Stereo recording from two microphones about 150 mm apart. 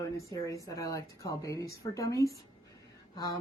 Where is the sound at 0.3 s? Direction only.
20° left (ahead or behind).